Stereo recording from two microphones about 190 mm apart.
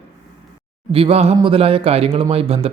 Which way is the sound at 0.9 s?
30° right (ahead or behind).